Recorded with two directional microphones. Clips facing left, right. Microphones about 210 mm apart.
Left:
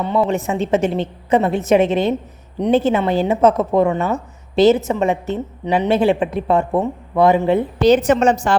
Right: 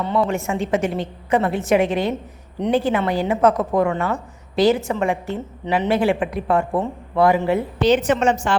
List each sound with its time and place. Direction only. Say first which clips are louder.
0.0 s a woman's voice: left 3 dB; 20° left (ahead or behind)
7.8 s a woman's voice: left 4 dB; 40° left (ahead or behind)